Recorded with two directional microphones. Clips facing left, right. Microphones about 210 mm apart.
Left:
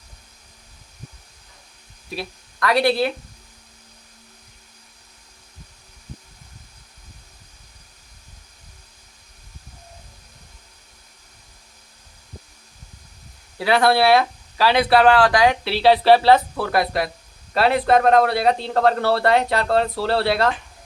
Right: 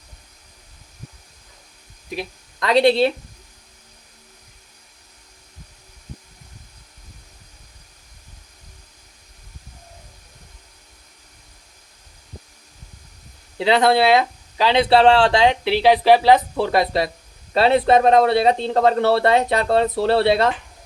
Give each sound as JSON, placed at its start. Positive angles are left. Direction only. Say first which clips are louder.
{"t": 2.0, "sound": "speech", "louder": "right 2 dB", "side_deg": -20}
{"t": 13.6, "sound": "speech", "louder": "right 1 dB", "side_deg": -20}